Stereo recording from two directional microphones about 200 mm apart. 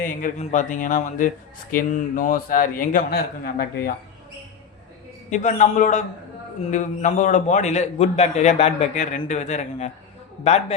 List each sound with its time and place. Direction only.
0.0 s a man's voice: 40° left (ahead or behind)
5.3 s a man's voice: 40° left (ahead or behind)